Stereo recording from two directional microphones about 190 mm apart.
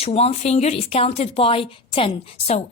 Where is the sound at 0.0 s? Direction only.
35° left (ahead or behind).